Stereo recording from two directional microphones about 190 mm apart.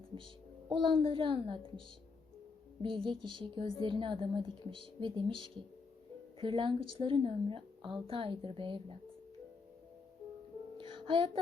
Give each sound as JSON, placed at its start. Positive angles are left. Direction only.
{"t": 0.7, "sound": "a woman's voice", "side_deg": -25}
{"t": 2.8, "sound": "a woman's voice", "side_deg": -25}
{"t": 10.8, "sound": "music", "side_deg": -25}